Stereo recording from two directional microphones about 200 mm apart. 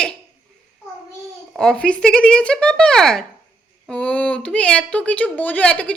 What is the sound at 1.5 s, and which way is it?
A woman's voice, 5° left (ahead or behind).